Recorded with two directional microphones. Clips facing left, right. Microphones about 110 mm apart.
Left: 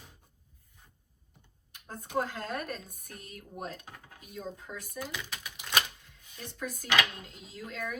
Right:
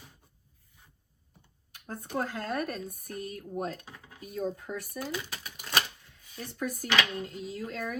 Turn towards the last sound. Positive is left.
turn(degrees=-45)  # may be behind; listen again after turning